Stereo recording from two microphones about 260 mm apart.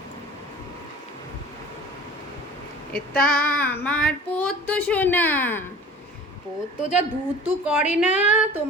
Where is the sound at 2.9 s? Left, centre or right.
Left.